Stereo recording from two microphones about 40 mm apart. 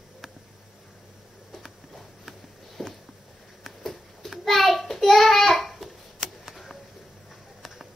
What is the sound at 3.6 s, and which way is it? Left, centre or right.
Child singing, centre.